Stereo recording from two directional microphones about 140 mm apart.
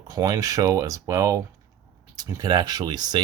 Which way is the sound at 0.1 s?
25° right (ahead or behind).